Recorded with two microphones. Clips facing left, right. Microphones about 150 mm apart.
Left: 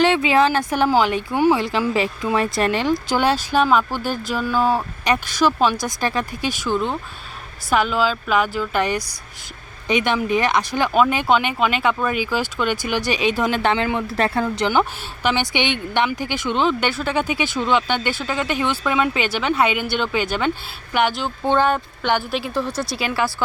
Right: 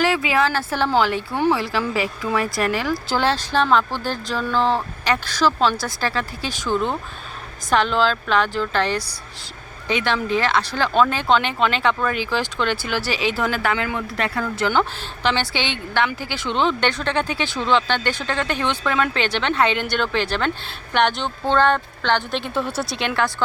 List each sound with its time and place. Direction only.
0.0 s speech: 25° left (ahead or behind); by 23.3 s 5° left (ahead or behind)